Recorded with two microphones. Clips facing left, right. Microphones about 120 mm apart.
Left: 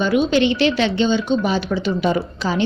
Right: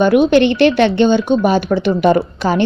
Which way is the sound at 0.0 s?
60° right (ahead or behind).